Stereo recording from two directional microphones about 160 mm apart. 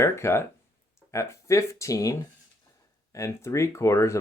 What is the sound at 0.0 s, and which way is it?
Speech, 15° left (ahead or behind).